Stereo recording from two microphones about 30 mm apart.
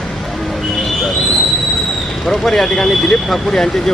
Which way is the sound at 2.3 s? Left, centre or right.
Centre.